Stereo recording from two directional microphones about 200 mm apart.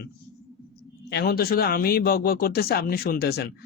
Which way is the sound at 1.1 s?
50° left (ahead or behind).